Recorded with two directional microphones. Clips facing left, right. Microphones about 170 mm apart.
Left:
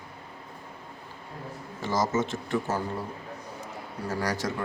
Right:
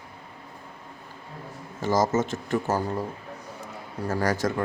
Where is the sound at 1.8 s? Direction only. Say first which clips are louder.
Right 4 dB; 45° right (ahead or behind).